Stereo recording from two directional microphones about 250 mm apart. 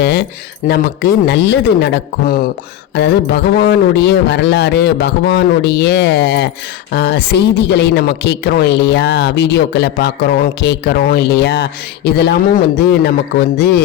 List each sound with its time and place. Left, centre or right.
0.0 s a woman's voice: left